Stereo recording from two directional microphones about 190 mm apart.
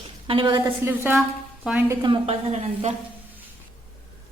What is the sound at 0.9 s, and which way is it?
A woman's voice, 10° right (ahead or behind).